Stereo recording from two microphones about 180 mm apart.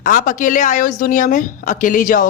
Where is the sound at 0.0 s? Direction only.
45° left (ahead or behind).